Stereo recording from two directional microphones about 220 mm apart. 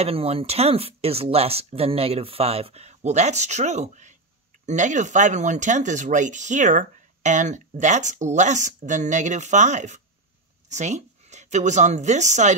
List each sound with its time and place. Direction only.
0.0 s a woman's voice: 25° right (ahead or behind)